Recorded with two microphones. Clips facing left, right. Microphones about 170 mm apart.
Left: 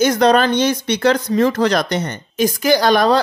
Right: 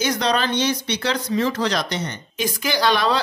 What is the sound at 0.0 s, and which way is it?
Speech, 50° left (ahead or behind).